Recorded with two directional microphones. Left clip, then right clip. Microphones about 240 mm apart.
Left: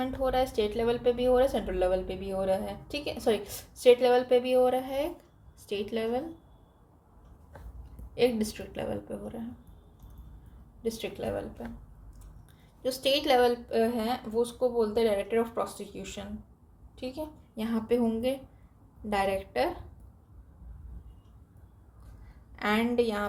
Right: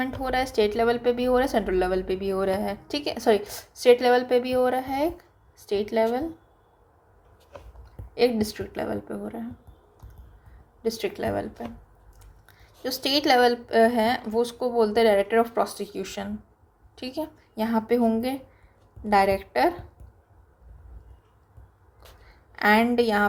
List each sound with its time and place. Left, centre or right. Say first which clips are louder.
0.0 s a woman's voice: right 2 dB; right
8.1 s a woman's voice: right 4 dB; centre
10.8 s a woman's voice: right 6 dB; right
12.8 s a woman's voice: right 3 dB; right
22.5 s a woman's voice: right 7 dB; right